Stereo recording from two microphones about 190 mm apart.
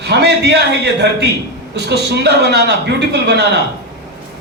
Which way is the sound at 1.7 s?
60° right (ahead or behind).